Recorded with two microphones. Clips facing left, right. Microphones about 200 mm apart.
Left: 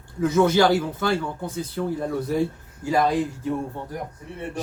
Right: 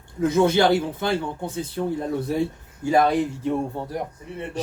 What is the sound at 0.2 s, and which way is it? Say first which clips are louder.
Speech: even; 25° right (ahead or behind).